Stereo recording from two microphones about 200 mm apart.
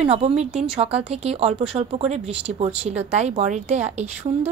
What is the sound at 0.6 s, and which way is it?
Speech, 30° right (ahead or behind).